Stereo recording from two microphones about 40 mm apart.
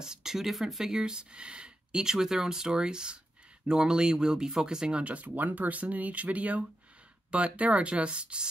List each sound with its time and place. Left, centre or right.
0.0 s speech: centre
5.0 s speech: right